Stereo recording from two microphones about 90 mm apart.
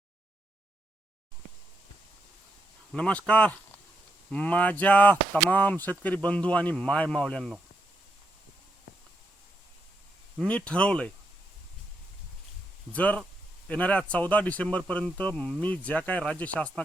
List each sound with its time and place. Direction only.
2.9 s speech: 15° left (ahead or behind)
10.7 s speech: 10° left (ahead or behind)
12.9 s speech: 15° left (ahead or behind)